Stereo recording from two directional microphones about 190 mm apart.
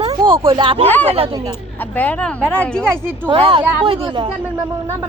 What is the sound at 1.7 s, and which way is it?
Speech, 10° left (ahead or behind).